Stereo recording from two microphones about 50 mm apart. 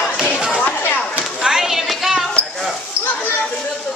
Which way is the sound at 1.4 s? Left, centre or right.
Centre.